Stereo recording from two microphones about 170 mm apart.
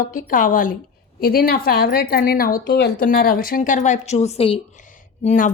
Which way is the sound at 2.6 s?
80° left.